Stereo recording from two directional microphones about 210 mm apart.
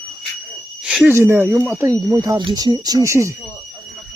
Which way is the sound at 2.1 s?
15° right (ahead or behind).